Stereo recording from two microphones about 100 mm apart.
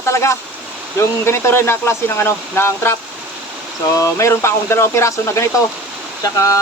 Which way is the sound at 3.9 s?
30° left (ahead or behind).